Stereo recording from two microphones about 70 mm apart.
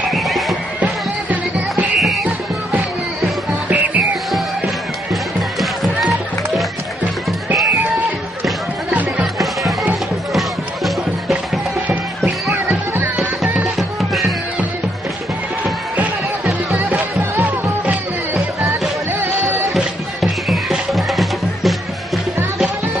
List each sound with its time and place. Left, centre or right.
0.1 s music: centre
2.0 s music: centre
3.7 s music: right
5.1 s music: centre
9.2 s music: centre
13.7 s music: centre
17.8 s music: right
19.1 s music: right
19.7 s music: centre